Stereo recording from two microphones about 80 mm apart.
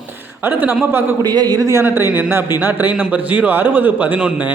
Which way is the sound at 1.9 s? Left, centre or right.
Right.